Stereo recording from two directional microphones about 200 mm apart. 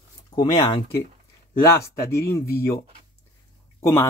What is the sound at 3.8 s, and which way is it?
Speech, 15° left (ahead or behind).